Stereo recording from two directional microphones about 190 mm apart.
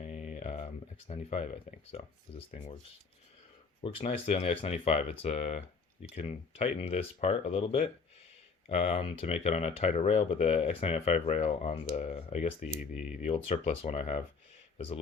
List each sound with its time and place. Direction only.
0.0 s speech: 40° left (ahead or behind)
3.8 s speech: 30° left (ahead or behind)